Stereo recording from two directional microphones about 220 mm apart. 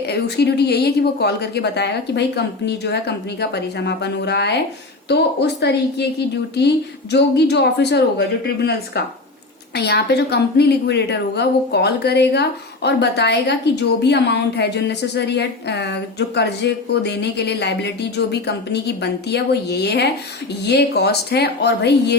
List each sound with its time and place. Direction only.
0.1 s a woman's voice: 50° left (ahead or behind)
9.7 s a woman's voice: 50° left (ahead or behind)